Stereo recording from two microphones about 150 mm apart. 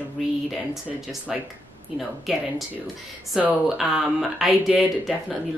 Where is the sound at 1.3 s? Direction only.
5° right (ahead or behind).